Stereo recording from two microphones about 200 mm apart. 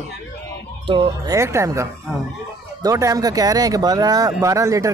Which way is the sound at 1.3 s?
15° right (ahead or behind).